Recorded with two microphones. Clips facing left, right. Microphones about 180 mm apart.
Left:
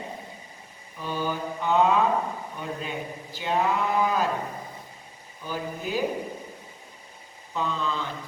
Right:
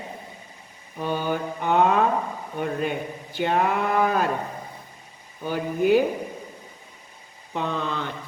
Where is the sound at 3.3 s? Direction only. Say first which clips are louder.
Right 3 dB; 60° right (ahead or behind).